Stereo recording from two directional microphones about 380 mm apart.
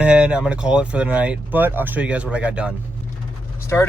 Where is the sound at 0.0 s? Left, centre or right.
Centre.